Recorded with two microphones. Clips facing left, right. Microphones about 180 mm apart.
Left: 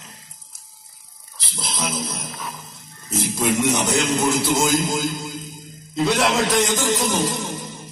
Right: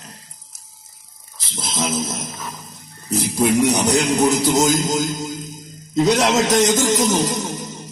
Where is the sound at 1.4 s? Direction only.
45° right (ahead or behind).